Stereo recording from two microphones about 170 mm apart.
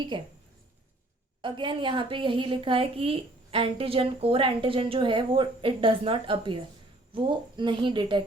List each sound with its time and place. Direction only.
0.1 s a woman's voice: 30° right (ahead or behind)
1.4 s a woman's voice: 30° right (ahead or behind)